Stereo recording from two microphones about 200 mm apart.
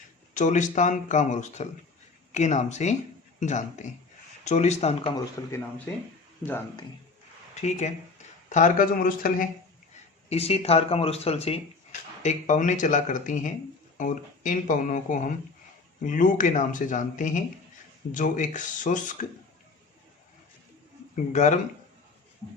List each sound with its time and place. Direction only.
0.3 s speech: 35° left (ahead or behind)
5.1 s speech: 15° left (ahead or behind)
7.5 s speech: 35° left (ahead or behind)
10.2 s speech: 30° left (ahead or behind)
21.3 s speech: 35° left (ahead or behind)